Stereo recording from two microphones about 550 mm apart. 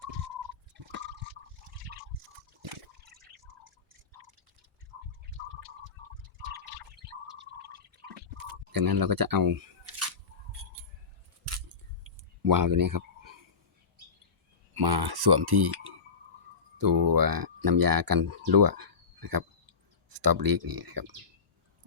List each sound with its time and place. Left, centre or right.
0.7 s liquid: centre
3.0 s drip: centre
7.3 s gargling: centre
8.7 s speech: right
12.4 s a sound: right
14.7 s speech: right